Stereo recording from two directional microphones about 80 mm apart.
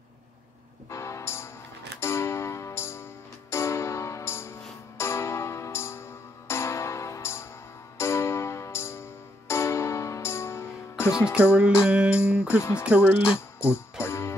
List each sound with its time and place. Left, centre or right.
0.8 s music: left
11.3 s music: centre
14.0 s music: left